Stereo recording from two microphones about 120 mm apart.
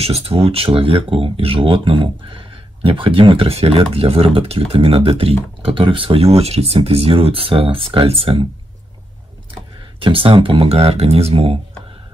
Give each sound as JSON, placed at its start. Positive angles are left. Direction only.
{"t": 0.0, "sound": "speech", "side_deg": -55}
{"t": 9.9, "sound": "speech", "side_deg": -45}